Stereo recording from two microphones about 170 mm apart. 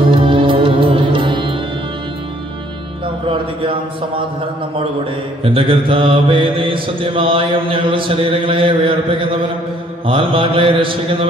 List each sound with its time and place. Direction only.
0.1 s music: 30° right (ahead or behind)
5.4 s mantra: 30° right (ahead or behind)